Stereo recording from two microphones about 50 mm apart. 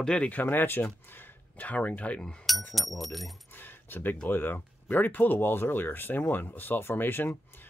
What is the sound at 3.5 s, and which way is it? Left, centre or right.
Keys jangling, left.